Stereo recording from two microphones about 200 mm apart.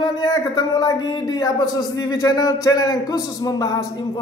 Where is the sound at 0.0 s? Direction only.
20° left (ahead or behind).